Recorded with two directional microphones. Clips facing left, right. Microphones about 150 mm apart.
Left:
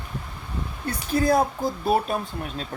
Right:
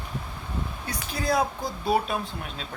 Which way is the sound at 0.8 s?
55° left (ahead or behind).